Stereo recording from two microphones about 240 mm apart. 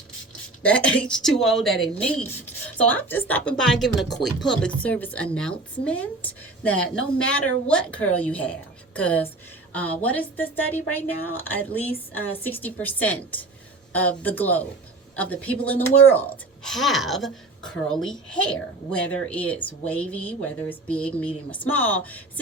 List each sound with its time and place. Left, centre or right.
0.6 s a woman's voice: centre